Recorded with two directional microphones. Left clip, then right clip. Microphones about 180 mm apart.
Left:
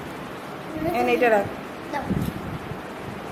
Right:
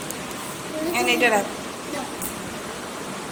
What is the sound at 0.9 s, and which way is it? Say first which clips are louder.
Speech: even; 25° left (ahead or behind).